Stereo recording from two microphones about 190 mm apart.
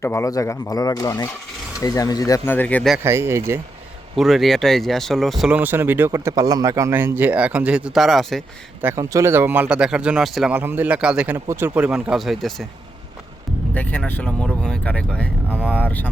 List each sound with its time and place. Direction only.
0.0 s speech: 15° left (ahead or behind)
3.0 s speech: 15° right (ahead or behind)
4.1 s speech: centre (ahead or behind)
8.8 s speech: 15° right (ahead or behind)
13.7 s speech: 10° left (ahead or behind)